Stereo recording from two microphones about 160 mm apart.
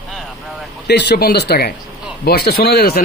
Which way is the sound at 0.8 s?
90° left.